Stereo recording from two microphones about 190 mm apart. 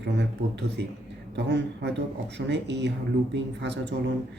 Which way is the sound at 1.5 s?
65° right (ahead or behind).